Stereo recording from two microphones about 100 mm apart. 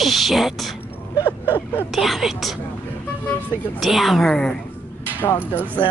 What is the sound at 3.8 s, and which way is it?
Speech, centre (ahead or behind).